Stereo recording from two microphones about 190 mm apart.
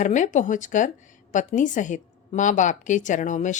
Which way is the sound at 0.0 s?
40° left (ahead or behind).